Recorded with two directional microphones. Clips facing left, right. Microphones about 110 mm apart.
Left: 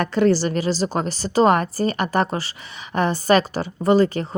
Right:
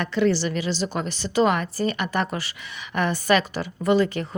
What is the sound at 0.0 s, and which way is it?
Speech, 45° left (ahead or behind).